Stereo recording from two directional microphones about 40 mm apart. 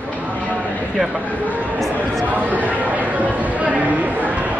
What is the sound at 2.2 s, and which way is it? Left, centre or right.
Chatter, right.